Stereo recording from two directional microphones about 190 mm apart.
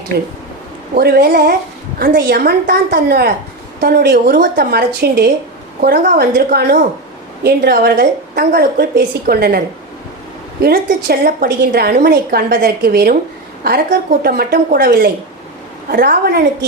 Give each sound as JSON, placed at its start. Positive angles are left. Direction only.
{"t": 0.1, "sound": "a woman's voice", "side_deg": -55}
{"t": 10.6, "sound": "a woman's voice", "side_deg": -55}